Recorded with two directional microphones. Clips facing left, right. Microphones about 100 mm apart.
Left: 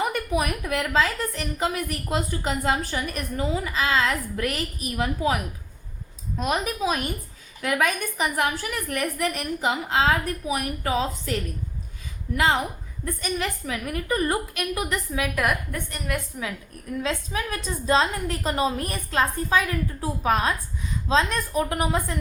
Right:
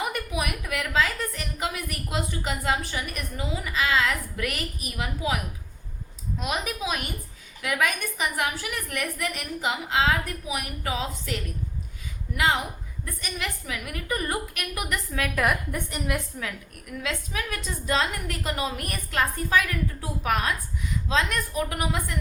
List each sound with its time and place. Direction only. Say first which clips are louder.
0.1 s a woman's voice: left 5 dB; 40° left (ahead or behind)
6.4 s a woman's voice: left 5 dB; 40° left (ahead or behind)
12.4 s a woman's voice: left 2 dB; 35° left (ahead or behind)
15.7 s a woman's voice: right 1 dB; 10° right (ahead or behind)
16.3 s a woman's voice: left 2 dB; 15° left (ahead or behind)
16.8 s a woman's voice: left 4 dB; 30° left (ahead or behind)